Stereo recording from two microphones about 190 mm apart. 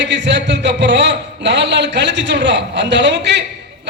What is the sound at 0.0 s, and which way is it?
A man's voice, 65° right (ahead or behind).